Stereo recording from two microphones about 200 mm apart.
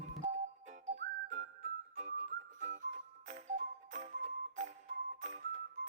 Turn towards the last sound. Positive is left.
turn(degrees=-35)  # may be behind; listen again after turning